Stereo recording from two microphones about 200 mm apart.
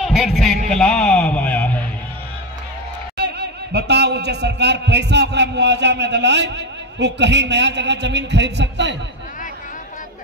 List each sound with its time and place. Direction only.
0.0 s a man's voice: centre (ahead or behind)
3.2 s a man's voice: 55° right (ahead or behind)